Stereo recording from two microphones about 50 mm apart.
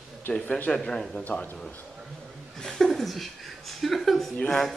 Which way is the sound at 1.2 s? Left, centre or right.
Left.